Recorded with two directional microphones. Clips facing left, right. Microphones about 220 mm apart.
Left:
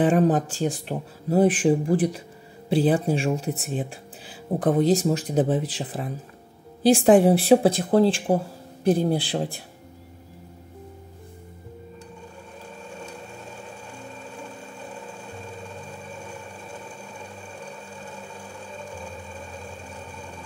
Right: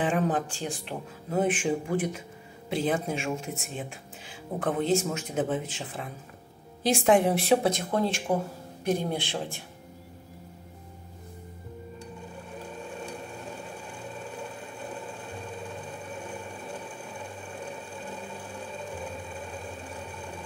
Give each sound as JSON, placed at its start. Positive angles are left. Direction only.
{"t": 0.0, "sound": "speech", "side_deg": 40}